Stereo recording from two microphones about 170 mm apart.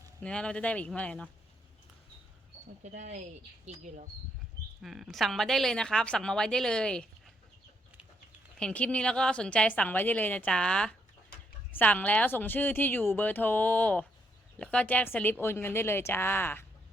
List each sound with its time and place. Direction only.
0.2 s a woman's voice: 5° left (ahead or behind)
3.7 s speech: 40° right (ahead or behind)
4.8 s speech: centre (ahead or behind)
8.5 s a woman's voice: 5° left (ahead or behind)